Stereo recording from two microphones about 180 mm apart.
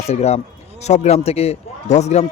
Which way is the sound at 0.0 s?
35° left (ahead or behind).